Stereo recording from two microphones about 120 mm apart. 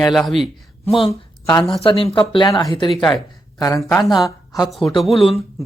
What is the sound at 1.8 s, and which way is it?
Speech, 45° left (ahead or behind).